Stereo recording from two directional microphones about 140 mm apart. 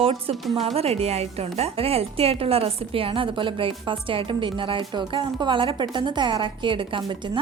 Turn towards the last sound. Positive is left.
turn(degrees=-35)  # may be behind; listen again after turning